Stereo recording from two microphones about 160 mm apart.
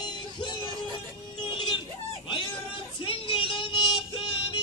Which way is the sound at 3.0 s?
35° left (ahead or behind).